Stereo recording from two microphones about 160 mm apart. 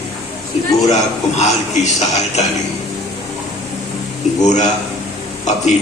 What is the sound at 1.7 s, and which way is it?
Speech, 45° left (ahead or behind).